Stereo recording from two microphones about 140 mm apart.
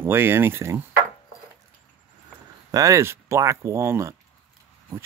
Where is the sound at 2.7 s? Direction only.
20° right (ahead or behind).